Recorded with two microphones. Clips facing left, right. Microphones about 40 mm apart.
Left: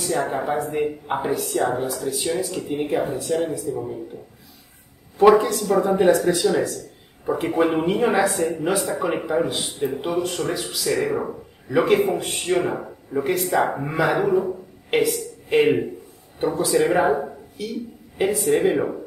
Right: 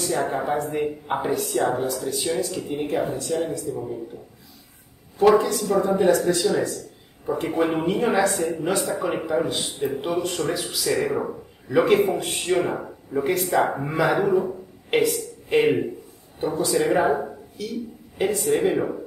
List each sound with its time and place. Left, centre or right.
0.0 s speech: centre
5.2 s speech: centre
6.3 s speech: centre